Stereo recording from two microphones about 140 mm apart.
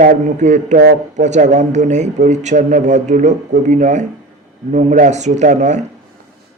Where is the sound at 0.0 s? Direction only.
60° right (ahead or behind).